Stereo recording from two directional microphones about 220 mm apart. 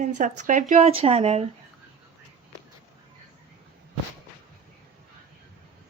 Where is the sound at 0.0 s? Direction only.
35° right (ahead or behind).